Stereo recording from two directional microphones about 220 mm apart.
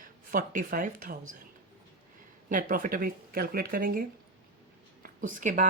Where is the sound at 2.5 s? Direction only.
40° right (ahead or behind).